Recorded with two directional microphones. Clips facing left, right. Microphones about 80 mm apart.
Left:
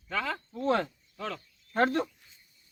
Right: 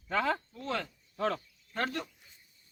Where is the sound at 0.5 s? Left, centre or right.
Left.